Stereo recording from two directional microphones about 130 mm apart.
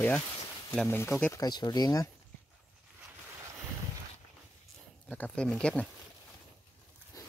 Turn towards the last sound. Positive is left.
turn(degrees=10)  # may be behind; listen again after turning